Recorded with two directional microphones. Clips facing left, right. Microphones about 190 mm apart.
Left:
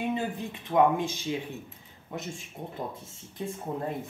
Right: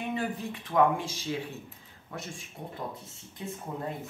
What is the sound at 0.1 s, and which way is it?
Speech, 20° left (ahead or behind).